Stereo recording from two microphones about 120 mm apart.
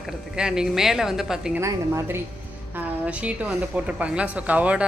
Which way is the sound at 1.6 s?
25° right (ahead or behind).